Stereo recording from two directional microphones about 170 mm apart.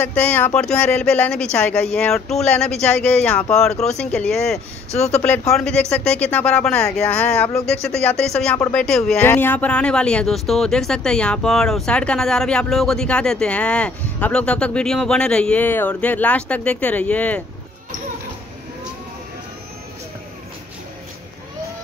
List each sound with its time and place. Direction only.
0.0 s speech: 10° left (ahead or behind)
4.9 s speech: 40° left (ahead or behind)
5.5 s speech: 5° left (ahead or behind)